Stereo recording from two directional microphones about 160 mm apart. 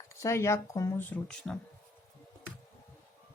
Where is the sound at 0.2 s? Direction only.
15° left (ahead or behind).